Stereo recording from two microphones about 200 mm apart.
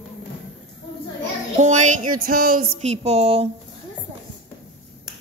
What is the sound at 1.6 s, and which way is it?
A man's voice, 40° right (ahead or behind).